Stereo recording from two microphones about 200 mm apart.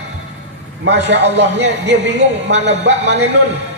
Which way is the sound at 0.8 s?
60° right (ahead or behind).